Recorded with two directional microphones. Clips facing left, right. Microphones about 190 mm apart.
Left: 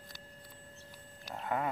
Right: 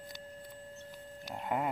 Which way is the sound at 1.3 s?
15° right (ahead or behind).